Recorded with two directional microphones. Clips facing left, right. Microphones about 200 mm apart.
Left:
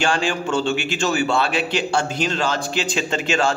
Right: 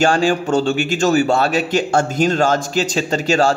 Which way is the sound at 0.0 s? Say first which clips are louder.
Right 6 dB; 40° right (ahead or behind).